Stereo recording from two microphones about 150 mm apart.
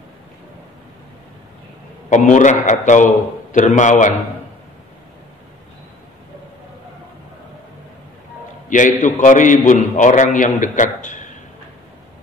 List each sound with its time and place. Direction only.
2.0 s a man's voice: 55° left (ahead or behind)
8.6 s a man's voice: 60° left (ahead or behind)